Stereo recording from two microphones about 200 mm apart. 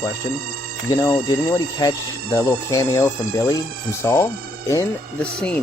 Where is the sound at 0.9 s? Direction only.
20° left (ahead or behind).